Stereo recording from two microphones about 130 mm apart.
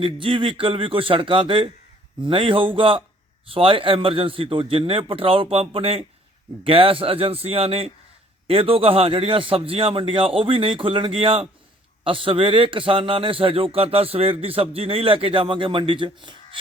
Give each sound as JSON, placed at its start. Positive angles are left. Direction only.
{"t": 0.0, "sound": "a man's voice", "side_deg": -40}